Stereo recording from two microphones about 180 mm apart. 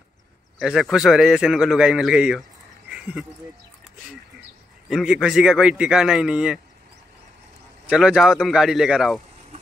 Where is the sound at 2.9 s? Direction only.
5° right (ahead or behind).